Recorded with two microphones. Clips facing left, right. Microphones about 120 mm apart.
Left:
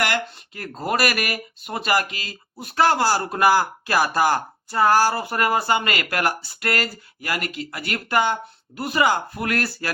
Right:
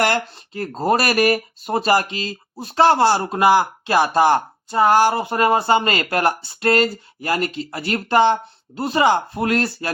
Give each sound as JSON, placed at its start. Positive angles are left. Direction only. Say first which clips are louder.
{"t": 0.0, "sound": "speech", "louder": "right 4 dB", "side_deg": -30}